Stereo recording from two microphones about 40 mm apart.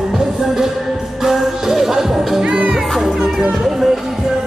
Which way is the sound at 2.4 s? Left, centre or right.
Right.